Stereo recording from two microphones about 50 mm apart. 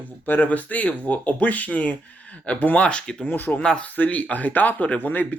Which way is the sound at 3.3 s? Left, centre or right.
Left.